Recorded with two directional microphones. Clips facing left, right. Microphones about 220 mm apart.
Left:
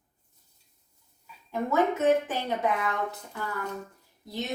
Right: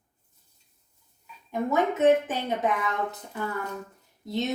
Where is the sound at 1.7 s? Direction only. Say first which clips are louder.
Right 2 dB; 20° right (ahead or behind).